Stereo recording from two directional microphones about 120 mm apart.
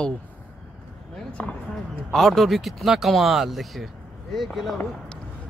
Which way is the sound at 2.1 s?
Centre (ahead or behind).